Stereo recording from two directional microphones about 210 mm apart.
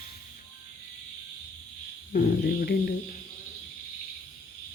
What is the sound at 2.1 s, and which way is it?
Speech, 50° left (ahead or behind).